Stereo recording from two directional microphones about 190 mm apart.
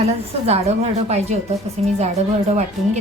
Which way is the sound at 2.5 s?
35° right (ahead or behind).